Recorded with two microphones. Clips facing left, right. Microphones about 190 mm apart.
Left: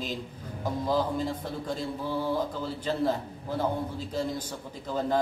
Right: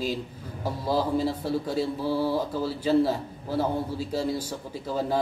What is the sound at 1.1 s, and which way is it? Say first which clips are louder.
A man's voice: right 6 dB; 5° right (ahead or behind).